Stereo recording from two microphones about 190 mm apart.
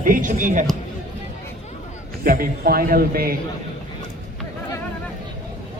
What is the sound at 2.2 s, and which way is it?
A man's voice, 50° right (ahead or behind).